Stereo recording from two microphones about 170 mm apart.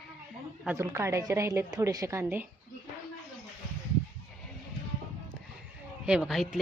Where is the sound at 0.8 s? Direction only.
15° right (ahead or behind).